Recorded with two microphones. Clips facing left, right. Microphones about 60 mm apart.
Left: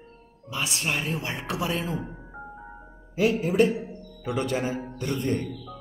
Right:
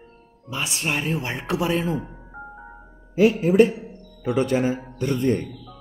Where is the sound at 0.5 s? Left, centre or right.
Right.